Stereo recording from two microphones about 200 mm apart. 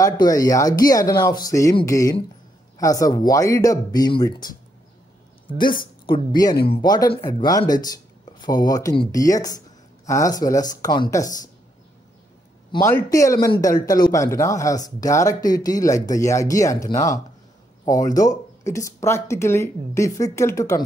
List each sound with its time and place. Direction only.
0.0 s speech: 20° left (ahead or behind)
6.0 s speech: 20° left (ahead or behind)
12.7 s speech: 15° left (ahead or behind)